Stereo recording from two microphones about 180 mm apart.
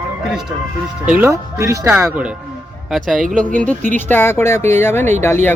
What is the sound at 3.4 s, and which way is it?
Speech, 45° right (ahead or behind).